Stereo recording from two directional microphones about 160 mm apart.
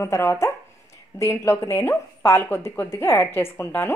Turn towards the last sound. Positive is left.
turn(degrees=15)  # may be behind; listen again after turning